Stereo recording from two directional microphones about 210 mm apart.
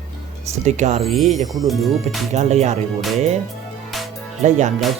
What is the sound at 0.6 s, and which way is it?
Speech, 35° right (ahead or behind).